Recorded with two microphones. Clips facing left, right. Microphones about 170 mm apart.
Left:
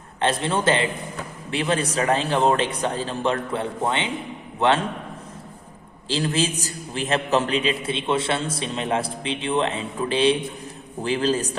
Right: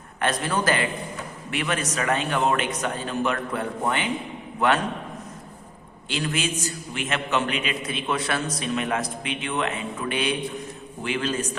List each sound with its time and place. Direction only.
0.2 s a man's voice: 25° left (ahead or behind)
6.1 s a man's voice: 30° left (ahead or behind)